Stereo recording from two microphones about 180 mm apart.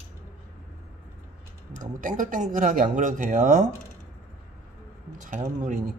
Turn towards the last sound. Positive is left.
turn(degrees=-45)  # may be behind; listen again after turning